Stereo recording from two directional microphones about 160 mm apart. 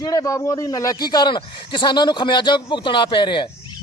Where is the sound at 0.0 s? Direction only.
20° left (ahead or behind).